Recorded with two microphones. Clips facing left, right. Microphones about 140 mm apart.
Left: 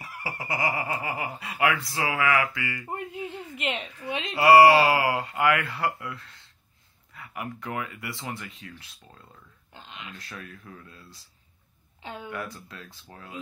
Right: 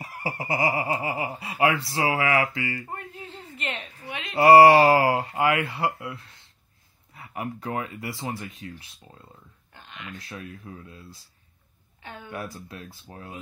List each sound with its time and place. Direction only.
0.0 s speech: 40° right (ahead or behind)
2.9 s a sound: 20° left (ahead or behind)
4.4 s speech: 40° right (ahead or behind)
9.8 s a sound: 20° left (ahead or behind)
10.1 s speech: 25° right (ahead or behind)
12.0 s speech: 20° left (ahead or behind)
12.3 s speech: 25° right (ahead or behind)